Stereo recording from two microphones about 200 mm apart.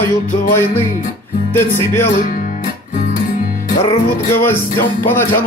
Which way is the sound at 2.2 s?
40° left (ahead or behind).